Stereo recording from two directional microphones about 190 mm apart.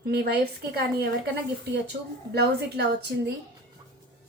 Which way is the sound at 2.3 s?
60° right (ahead or behind).